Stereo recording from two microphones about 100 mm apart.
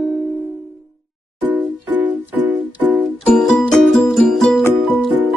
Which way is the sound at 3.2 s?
10° left (ahead or behind).